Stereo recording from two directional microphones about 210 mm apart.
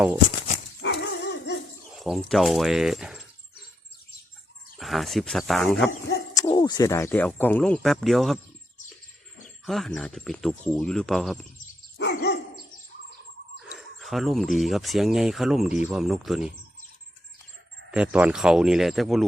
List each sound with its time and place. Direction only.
0.8 s dog: 55° left (ahead or behind)
2.0 s speech: centre (ahead or behind)
4.8 s speech: centre (ahead or behind)
6.3 s speech: 15° left (ahead or behind); by 8.4 s centre (ahead or behind)
9.6 s speech: centre (ahead or behind)
11.9 s dog: 55° left (ahead or behind)
13.6 s speech: centre (ahead or behind)
17.9 s speech: 5° right (ahead or behind)